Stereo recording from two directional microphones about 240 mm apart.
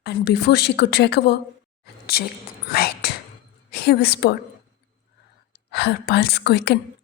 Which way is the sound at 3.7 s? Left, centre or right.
Left.